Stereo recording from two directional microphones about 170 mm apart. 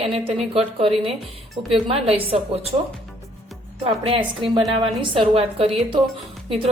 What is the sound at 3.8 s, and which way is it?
A woman's voice, 35° right (ahead or behind).